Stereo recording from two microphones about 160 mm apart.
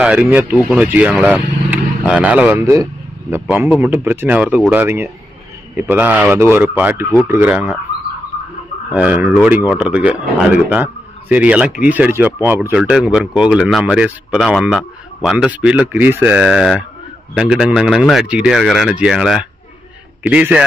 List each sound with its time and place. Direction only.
0.0 s speech: 5° right (ahead or behind)
2.6 s a man's voice: 20° right (ahead or behind)
8.9 s speech: 10° right (ahead or behind)